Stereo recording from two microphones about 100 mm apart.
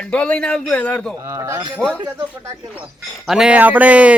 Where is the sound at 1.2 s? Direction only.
30° right (ahead or behind).